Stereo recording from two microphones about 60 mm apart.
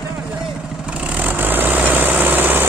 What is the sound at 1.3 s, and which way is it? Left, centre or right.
Vehicle, right.